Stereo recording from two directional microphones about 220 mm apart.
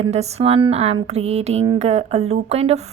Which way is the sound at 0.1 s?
30° right (ahead or behind).